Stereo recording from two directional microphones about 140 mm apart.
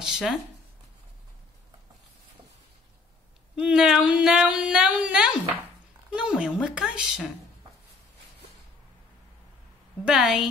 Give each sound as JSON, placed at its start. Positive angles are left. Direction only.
{"t": 0.0, "sound": "a woman's voice", "side_deg": -5}
{"t": 3.5, "sound": "a woman's voice", "side_deg": -5}
{"t": 10.0, "sound": "speech", "side_deg": -5}